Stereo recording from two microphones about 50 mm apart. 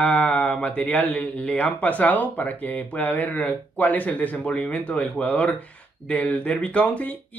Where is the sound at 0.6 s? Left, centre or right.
Left.